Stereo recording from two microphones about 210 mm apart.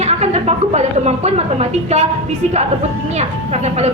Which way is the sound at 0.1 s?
30° right (ahead or behind).